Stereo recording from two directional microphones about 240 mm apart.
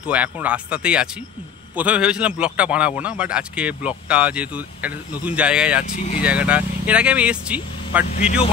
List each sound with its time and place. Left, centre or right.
0.0 s a man's voice: centre
5.9 s speech: left
6.2 s a man's voice: centre
8.1 s speech: left